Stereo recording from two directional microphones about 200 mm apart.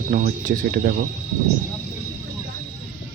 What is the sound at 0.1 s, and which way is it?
Speech, 40° right (ahead or behind).